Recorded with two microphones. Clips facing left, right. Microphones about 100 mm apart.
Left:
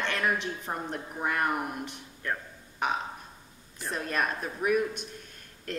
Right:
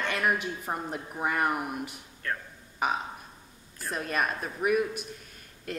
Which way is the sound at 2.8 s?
10° right (ahead or behind).